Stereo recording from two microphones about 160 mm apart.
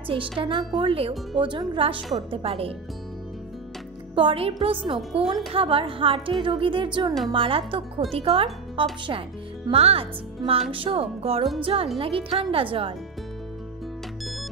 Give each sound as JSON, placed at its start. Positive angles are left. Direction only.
{"t": 0.0, "sound": "speech", "side_deg": -35}
{"t": 4.1, "sound": "speech", "side_deg": -35}